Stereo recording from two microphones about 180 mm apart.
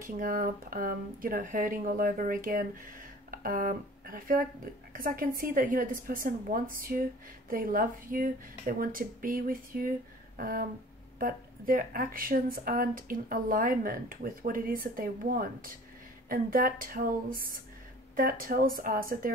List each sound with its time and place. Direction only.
0.0 s a woman's voice: 50° right (ahead or behind)